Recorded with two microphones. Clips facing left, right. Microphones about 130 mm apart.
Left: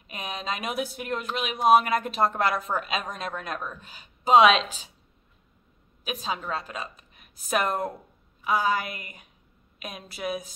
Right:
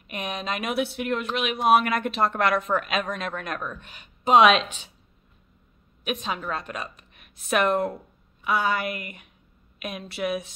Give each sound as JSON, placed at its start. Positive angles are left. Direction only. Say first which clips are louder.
{"t": 0.1, "sound": "speech", "louder": "right 2 dB", "side_deg": 35}
{"t": 6.0, "sound": "speech", "louder": "right 2 dB", "side_deg": 35}